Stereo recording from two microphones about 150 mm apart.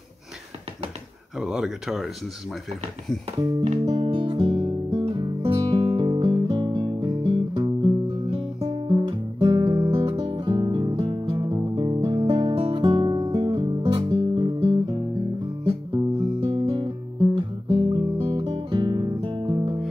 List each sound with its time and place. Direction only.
1.4 s speech: 5° right (ahead or behind)
3.6 s music: 45° right (ahead or behind)
3.9 s music: 30° right (ahead or behind)
9.8 s music: 40° right (ahead or behind)